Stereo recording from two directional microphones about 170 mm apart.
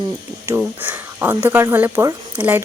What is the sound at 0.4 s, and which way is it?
A woman's voice, 15° right (ahead or behind).